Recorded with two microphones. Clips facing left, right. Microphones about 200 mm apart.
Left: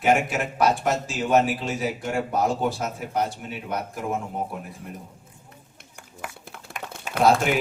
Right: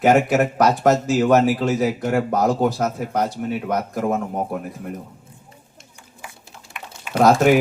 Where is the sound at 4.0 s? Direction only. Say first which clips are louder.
Right 7 dB; 65° right (ahead or behind).